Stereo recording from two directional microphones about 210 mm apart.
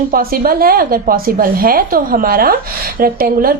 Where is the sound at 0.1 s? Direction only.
45° right (ahead or behind).